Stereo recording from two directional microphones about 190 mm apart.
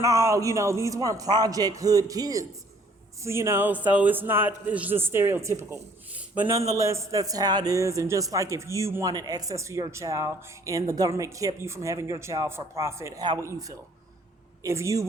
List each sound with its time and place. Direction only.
0.0 s a man's voice: 15° right (ahead or behind)